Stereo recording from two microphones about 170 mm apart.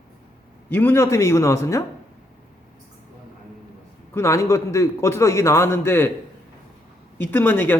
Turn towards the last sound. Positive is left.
turn(degrees=10)  # may be behind; listen again after turning